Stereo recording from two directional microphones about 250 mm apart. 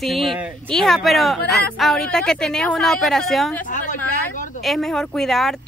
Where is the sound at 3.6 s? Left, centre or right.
Left.